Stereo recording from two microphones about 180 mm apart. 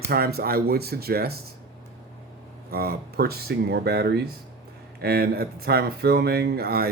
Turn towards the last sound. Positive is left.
turn(degrees=-60)  # may be behind; listen again after turning